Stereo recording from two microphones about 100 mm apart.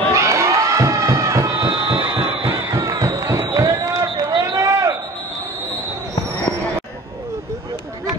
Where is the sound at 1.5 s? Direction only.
65° right (ahead or behind).